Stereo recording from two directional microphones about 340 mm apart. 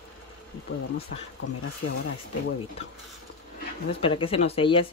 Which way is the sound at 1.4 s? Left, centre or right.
Left.